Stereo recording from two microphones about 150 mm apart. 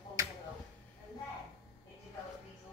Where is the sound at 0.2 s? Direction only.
25° right (ahead or behind).